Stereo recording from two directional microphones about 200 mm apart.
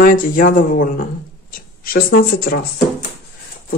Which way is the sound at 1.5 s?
45° left (ahead or behind).